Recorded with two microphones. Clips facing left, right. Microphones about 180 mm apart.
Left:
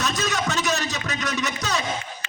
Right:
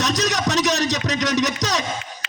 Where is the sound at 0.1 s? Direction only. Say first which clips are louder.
Right 4 dB; 40° right (ahead or behind).